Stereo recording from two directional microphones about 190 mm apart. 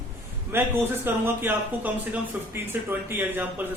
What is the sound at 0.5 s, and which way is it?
A man's voice, 10° right (ahead or behind).